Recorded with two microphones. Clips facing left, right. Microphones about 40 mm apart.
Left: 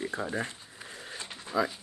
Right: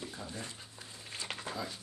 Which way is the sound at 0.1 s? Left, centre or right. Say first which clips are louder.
Left 11 dB; left.